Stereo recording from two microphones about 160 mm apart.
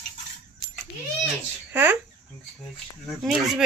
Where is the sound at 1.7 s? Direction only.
15° right (ahead or behind).